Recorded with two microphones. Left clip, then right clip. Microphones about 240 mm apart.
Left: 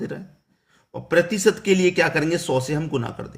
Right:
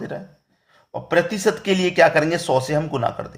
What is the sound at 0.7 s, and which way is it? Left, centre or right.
A man's voice, centre.